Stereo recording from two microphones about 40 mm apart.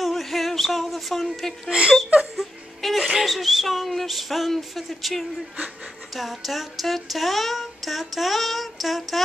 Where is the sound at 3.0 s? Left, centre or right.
Centre.